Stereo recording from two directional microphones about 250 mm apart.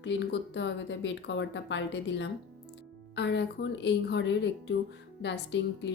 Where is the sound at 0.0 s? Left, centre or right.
Left.